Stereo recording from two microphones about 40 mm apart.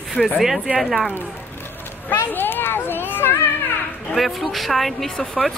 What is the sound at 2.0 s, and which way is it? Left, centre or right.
Speech, left.